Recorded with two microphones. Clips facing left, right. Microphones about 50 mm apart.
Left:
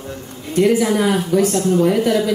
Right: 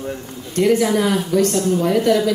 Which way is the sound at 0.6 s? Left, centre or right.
Centre.